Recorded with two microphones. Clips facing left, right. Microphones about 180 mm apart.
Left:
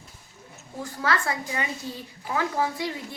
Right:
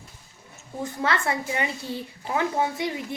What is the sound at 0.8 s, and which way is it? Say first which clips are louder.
Speech: right 1 dB; 20° right (ahead or behind).